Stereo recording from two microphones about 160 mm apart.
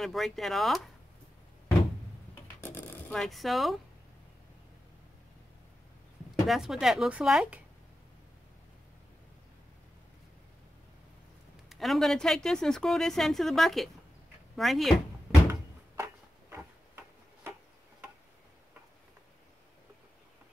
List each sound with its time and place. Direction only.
0.0 s speech: centre (ahead or behind)
2.6 s a sound: 15° left (ahead or behind)
3.2 s speech: centre (ahead or behind)
6.4 s speech: centre (ahead or behind)
11.7 s speech: centre (ahead or behind)
16.0 s tick-tock: 15° right (ahead or behind)